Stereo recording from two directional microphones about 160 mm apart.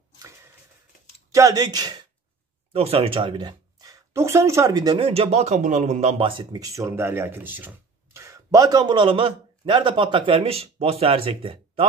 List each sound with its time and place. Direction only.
1.3 s speech: 20° right (ahead or behind)
2.7 s speech: 40° right (ahead or behind)